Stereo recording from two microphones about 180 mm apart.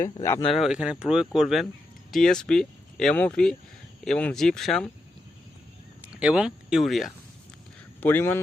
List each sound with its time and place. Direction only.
0.0 s speech: 15° left (ahead or behind)
0.5 s speech: 5° right (ahead or behind)
6.0 s speech: 5° right (ahead or behind)
8.0 s speech: 10° left (ahead or behind)